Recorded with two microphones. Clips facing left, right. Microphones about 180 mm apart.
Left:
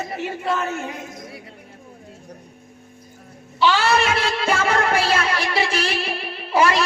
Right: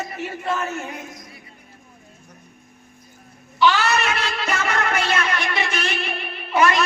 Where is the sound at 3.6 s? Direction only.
30° left (ahead or behind).